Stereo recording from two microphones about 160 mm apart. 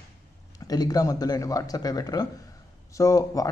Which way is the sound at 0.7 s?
25° left (ahead or behind).